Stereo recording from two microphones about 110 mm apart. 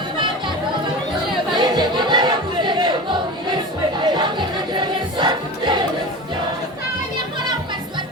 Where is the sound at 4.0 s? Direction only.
45° right (ahead or behind).